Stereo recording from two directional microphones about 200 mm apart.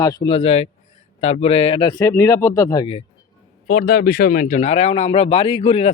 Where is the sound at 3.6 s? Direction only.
50° left (ahead or behind); by 5.9 s 30° left (ahead or behind).